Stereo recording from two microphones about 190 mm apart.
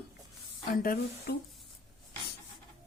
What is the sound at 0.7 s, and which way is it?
Speech, 50° left (ahead or behind).